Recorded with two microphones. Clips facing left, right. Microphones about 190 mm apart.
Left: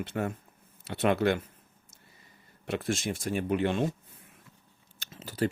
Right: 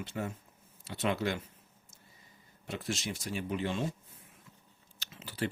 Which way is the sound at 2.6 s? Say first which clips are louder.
Left 6 dB; 60° left (ahead or behind).